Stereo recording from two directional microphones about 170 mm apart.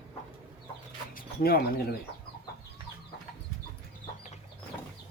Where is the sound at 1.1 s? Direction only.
60° left (ahead or behind).